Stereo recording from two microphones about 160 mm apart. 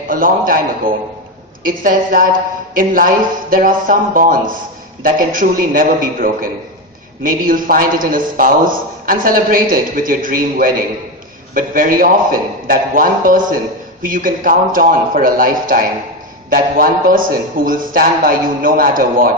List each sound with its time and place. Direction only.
0.1 s a man's voice: 60° right (ahead or behind)